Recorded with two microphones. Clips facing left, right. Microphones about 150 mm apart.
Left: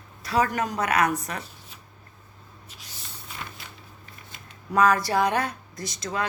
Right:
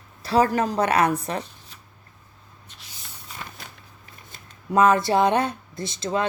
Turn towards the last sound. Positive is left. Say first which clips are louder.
# right 5 dB
turn(degrees=-25)  # may be behind; listen again after turning